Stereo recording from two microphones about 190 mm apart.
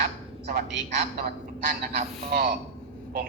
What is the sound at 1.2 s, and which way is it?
Speech, 50° right (ahead or behind).